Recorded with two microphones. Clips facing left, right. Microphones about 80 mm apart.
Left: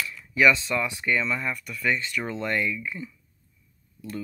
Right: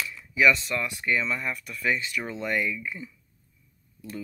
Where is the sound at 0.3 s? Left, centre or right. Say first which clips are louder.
Left 1 dB; centre.